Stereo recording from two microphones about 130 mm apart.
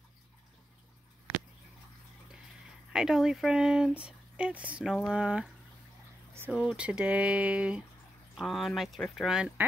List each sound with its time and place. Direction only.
2.9 s speech: 5° right (ahead or behind)
6.5 s speech: 5° right (ahead or behind)